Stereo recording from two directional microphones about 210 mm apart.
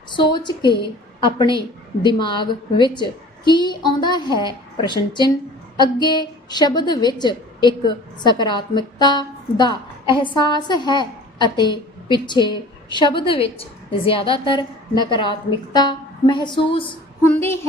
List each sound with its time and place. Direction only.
0.1 s a woman's voice: 20° left (ahead or behind)
17.2 s a woman's voice: 10° left (ahead or behind)